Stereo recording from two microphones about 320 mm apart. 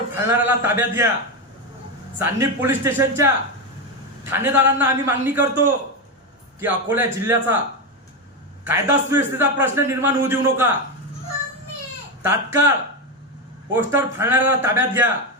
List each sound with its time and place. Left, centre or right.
0.3 s a man's voice: centre
2.1 s a man's voice: centre
4.3 s a man's voice: centre
8.6 s a man's voice: centre
12.2 s a man's voice: centre
13.7 s a man's voice: centre